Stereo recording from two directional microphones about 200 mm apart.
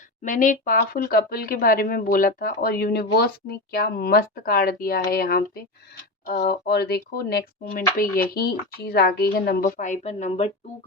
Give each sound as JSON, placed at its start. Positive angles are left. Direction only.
{"t": 0.2, "sound": "speech", "side_deg": 40}